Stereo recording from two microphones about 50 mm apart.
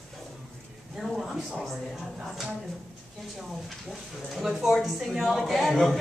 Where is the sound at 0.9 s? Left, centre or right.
Centre.